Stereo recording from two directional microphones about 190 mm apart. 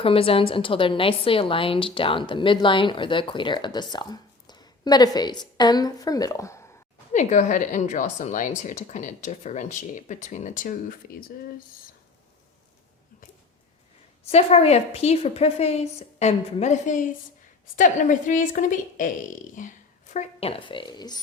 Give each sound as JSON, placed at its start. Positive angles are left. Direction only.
{"t": 0.0, "sound": "a woman's voice", "side_deg": 30}
{"t": 7.1, "sound": "speech", "side_deg": 40}
{"t": 14.3, "sound": "a woman's voice", "side_deg": 30}